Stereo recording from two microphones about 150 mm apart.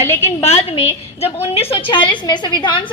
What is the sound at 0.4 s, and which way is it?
A woman's voice, 45° left (ahead or behind).